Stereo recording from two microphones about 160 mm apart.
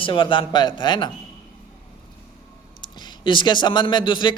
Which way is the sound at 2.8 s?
30° left (ahead or behind).